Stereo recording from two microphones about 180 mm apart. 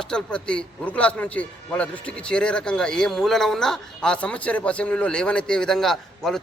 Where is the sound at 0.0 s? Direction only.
5° left (ahead or behind).